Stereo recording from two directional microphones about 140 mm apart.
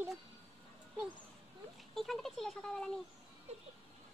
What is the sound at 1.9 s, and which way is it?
Speech, centre (ahead or behind).